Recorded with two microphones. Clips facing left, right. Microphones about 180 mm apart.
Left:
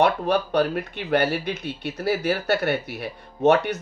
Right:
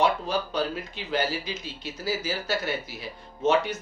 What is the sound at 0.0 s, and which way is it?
Speech, 65° left (ahead or behind).